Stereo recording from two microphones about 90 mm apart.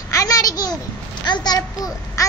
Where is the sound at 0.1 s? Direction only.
40° left (ahead or behind).